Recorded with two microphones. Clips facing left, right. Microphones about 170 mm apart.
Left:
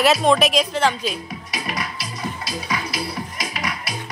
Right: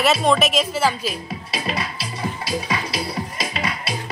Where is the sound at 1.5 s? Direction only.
30° right (ahead or behind).